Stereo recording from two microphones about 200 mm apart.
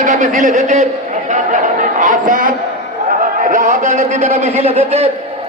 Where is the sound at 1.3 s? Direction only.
40° right (ahead or behind).